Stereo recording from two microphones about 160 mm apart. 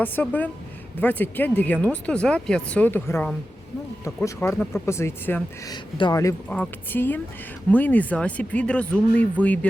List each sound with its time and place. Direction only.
0.0 s speech: 10° left (ahead or behind)
5.7 s speech: 25° left (ahead or behind)
6.5 s speech: 10° left (ahead or behind)